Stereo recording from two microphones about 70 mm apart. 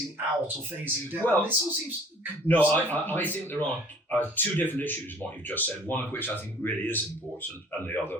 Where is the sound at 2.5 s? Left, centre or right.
Left.